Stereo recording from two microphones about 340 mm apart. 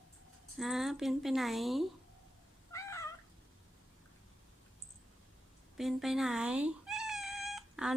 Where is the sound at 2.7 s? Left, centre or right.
Centre.